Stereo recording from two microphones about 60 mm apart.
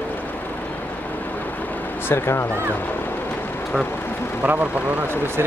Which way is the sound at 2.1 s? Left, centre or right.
Left.